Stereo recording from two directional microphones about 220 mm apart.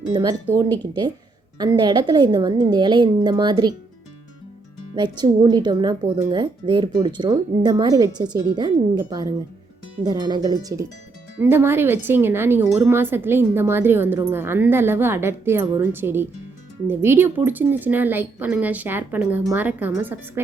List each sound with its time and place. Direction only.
0.1 s speech: 20° right (ahead or behind)
4.9 s speech: 20° right (ahead or behind)